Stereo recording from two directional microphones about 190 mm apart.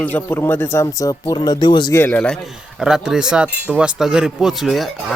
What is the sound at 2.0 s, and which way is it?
Speech, 10° left (ahead or behind).